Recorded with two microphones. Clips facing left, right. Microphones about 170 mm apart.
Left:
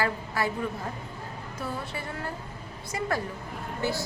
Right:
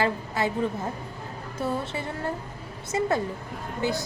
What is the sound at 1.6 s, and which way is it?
A woman's voice, 25° right (ahead or behind).